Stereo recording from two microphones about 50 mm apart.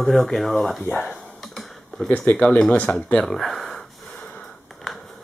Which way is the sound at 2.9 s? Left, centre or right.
Left.